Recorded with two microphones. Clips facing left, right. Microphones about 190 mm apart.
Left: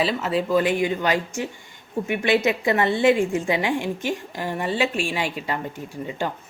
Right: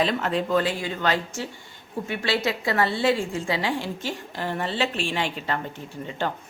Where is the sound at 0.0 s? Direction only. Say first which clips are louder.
Left 1 dB; 5° left (ahead or behind).